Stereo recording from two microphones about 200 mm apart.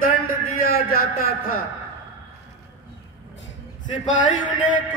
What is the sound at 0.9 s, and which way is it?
Speech, 50° left (ahead or behind).